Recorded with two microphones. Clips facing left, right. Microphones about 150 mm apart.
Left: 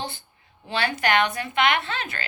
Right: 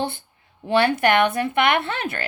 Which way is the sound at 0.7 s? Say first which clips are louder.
Right 6 dB; 60° right (ahead or behind).